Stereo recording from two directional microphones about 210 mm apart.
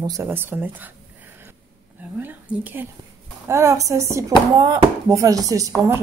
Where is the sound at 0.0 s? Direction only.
15° right (ahead or behind).